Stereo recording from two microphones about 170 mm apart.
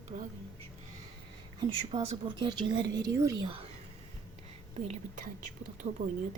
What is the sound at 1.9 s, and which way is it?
Speech, 35° right (ahead or behind).